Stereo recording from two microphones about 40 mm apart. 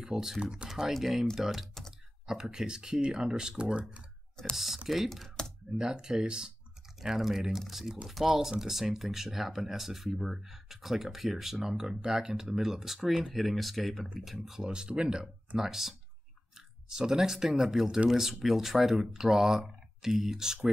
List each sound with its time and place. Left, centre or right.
0.0 s speech: centre
0.4 s speech: right
0.7 s speech: centre; by 4.0 s right
4.4 s speech: centre
4.8 s speech: centre
5.4 s typing: centre
5.8 s speech: centre
14.4 s speech: centre
16.5 s a sound: centre
17.6 s speech: centre